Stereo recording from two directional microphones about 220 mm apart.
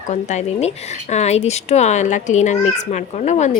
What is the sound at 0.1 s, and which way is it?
A child's voice, 30° left (ahead or behind).